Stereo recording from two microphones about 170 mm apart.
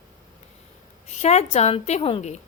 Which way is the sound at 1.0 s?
40° left (ahead or behind).